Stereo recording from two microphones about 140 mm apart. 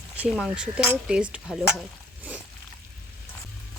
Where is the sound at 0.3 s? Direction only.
5° right (ahead or behind).